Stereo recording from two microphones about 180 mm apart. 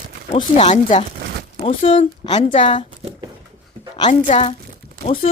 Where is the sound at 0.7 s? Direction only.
35° left (ahead or behind).